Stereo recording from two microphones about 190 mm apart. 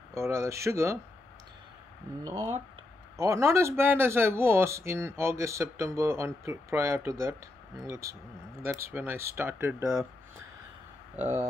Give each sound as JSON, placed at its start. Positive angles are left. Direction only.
{"t": 0.1, "sound": "speech", "side_deg": -15}
{"t": 2.2, "sound": "speech", "side_deg": -10}
{"t": 11.1, "sound": "speech", "side_deg": -10}